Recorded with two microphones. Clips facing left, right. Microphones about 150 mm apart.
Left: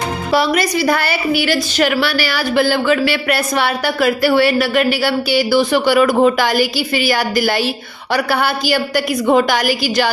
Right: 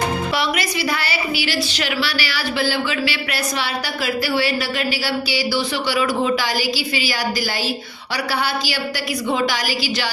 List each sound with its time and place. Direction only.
0.3 s a woman's voice: 40° left (ahead or behind)